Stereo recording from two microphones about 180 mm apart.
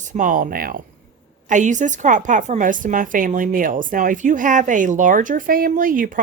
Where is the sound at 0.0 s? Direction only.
45° right (ahead or behind).